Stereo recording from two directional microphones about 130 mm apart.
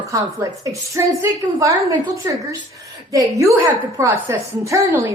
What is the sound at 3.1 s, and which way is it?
A woman's voice, 25° right (ahead or behind).